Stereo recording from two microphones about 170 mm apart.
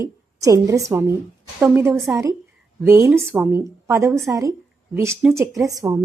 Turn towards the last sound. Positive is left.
turn(degrees=-20)  # may be behind; listen again after turning